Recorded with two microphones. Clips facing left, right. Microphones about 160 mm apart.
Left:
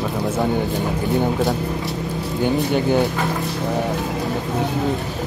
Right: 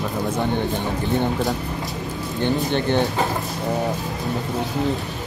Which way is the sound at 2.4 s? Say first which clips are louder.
Left 2 dB; 5° left (ahead or behind).